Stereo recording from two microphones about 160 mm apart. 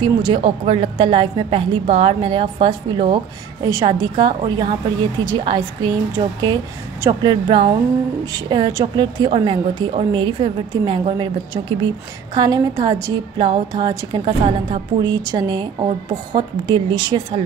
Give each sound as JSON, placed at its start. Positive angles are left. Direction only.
{"t": 0.0, "sound": "a woman's voice", "side_deg": -30}